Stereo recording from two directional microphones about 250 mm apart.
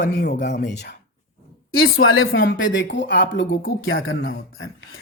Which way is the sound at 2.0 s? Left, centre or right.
Left.